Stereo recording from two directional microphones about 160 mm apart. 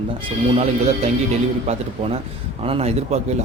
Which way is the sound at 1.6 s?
40° right (ahead or behind).